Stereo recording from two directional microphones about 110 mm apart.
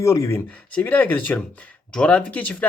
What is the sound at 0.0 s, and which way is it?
Speech, 25° left (ahead or behind).